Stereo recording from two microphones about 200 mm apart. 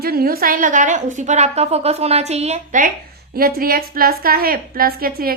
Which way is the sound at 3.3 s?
50° right (ahead or behind).